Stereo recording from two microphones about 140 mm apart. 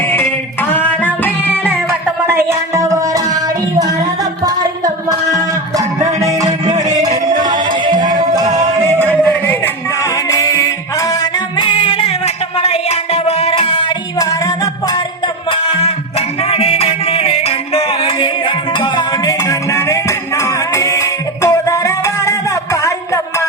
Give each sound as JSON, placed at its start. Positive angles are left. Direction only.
{"t": 0.0, "sound": "music", "side_deg": 15}
{"t": 2.2, "sound": "music", "side_deg": -20}
{"t": 6.1, "sound": "music", "side_deg": -20}
{"t": 6.7, "sound": "music", "side_deg": -60}
{"t": 7.3, "sound": "music", "side_deg": -35}
{"t": 8.9, "sound": "a sound", "side_deg": -15}
{"t": 9.2, "sound": "music", "side_deg": 10}
{"t": 11.6, "sound": "music", "side_deg": 40}
{"t": 14.2, "sound": "music", "side_deg": 25}
{"t": 15.4, "sound": "music", "side_deg": 45}